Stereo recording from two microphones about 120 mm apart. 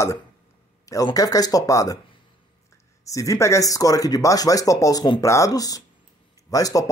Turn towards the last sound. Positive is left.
turn(degrees=30)  # may be behind; listen again after turning